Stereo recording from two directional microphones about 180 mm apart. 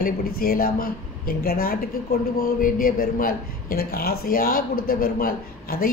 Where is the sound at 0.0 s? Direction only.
55° left (ahead or behind).